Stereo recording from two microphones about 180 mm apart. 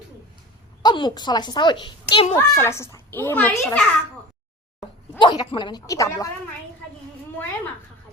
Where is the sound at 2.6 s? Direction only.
15° left (ahead or behind).